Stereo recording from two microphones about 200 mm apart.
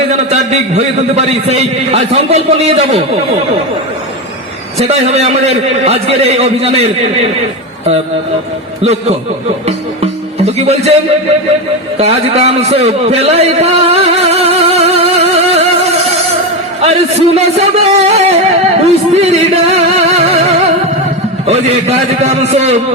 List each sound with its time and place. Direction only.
0.1 s a man's voice: 35° right (ahead or behind)
4.9 s a man's voice: 35° right (ahead or behind)
8.8 s a man's voice: 30° right (ahead or behind)
11.9 s a sound: 30° right (ahead or behind)
16.8 s a man's voice: 30° right (ahead or behind)